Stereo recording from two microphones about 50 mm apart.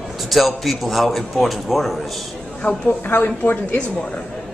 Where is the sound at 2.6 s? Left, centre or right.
Left.